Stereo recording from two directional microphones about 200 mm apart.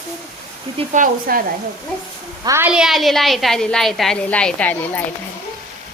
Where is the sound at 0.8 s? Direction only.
40° right (ahead or behind).